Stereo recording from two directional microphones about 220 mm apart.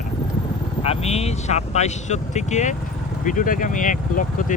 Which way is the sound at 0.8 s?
25° left (ahead or behind).